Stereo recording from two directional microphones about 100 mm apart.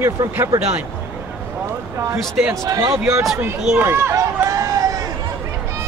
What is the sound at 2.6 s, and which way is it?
Speech, 35° right (ahead or behind).